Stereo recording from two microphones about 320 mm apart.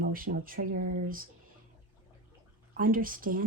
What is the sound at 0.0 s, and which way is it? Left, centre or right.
Speech, right.